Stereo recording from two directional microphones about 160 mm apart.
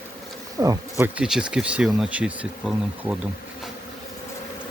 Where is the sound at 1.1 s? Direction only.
5° right (ahead or behind).